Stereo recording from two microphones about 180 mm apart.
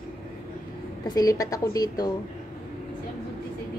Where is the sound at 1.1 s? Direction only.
20° left (ahead or behind).